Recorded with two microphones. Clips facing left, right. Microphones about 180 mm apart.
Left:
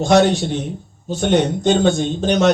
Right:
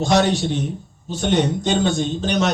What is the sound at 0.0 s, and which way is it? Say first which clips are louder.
A man's voice: left 4 dB; 50° left (ahead or behind).